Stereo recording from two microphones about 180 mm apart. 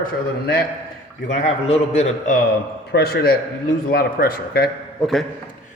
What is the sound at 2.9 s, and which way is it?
A man's voice, 60° left (ahead or behind).